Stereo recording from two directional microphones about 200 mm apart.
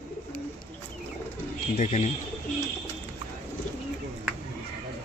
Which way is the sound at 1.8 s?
35° left (ahead or behind).